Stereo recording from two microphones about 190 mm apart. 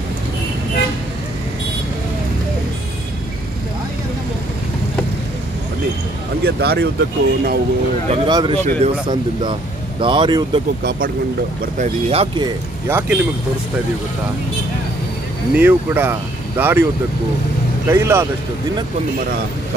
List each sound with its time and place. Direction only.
6.4 s speech: 55° right (ahead or behind)
8.1 s speech: 25° right (ahead or behind)
10.8 s speech: 50° right (ahead or behind)
11.8 s speech: 30° right (ahead or behind)
12.8 s speech: 10° right (ahead or behind)
15.5 s speech: 10° right (ahead or behind)
17.8 s speech: 15° right (ahead or behind)